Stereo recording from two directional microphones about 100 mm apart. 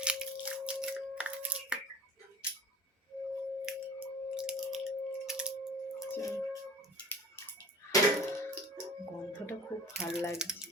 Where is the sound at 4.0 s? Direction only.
10° right (ahead or behind).